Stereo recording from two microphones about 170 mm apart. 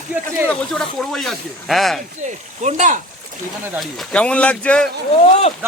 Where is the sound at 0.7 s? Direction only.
Centre (ahead or behind).